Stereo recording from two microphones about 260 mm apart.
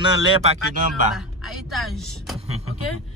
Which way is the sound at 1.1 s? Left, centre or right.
Centre.